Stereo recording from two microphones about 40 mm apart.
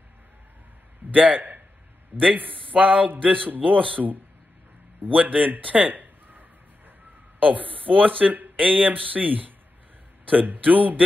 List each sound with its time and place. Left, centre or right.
1.1 s a man's voice: right
5.1 s speech: right
5.6 s a sound: right
7.3 s speech: right